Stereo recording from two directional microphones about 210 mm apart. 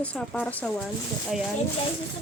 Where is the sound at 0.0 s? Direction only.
5° left (ahead or behind).